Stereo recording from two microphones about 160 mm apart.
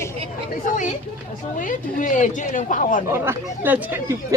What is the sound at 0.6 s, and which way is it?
Speech, 50° left (ahead or behind).